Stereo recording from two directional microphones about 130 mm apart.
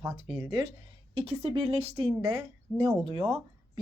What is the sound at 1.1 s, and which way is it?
A woman's voice, 50° right (ahead or behind).